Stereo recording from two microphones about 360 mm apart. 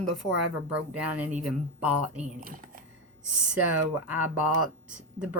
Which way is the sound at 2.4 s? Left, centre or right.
Right.